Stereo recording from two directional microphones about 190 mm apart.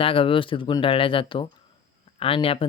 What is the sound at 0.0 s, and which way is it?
Speech, 30° left (ahead or behind).